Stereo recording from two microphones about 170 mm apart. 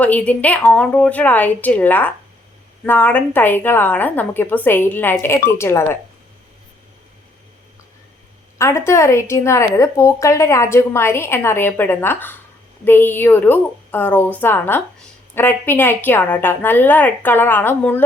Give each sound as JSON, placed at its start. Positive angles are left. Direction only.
{"t": 0.0, "sound": "a woman's voice", "side_deg": 10}
{"t": 8.5, "sound": "a woman's voice", "side_deg": 15}